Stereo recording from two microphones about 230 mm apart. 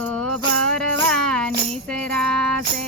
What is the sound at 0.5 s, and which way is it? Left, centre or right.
Music, centre.